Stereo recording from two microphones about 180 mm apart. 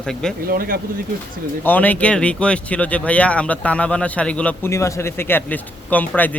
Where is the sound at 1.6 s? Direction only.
10° left (ahead or behind).